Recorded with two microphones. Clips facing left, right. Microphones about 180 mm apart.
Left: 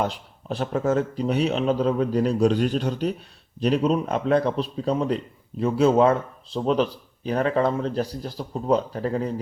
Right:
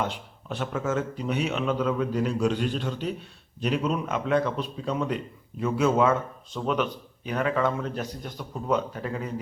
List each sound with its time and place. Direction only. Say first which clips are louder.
0.0 s speech: left 4 dB; 35° left (ahead or behind)